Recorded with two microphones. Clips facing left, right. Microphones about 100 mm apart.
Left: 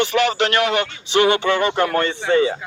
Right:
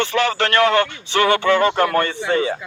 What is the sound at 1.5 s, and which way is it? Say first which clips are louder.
Speech: right 2 dB; 40° right (ahead or behind).